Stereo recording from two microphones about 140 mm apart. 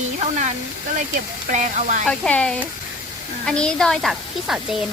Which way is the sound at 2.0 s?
5° left (ahead or behind).